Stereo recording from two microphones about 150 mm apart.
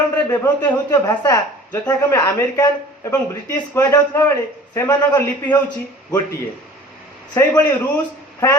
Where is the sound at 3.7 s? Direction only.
20° left (ahead or behind).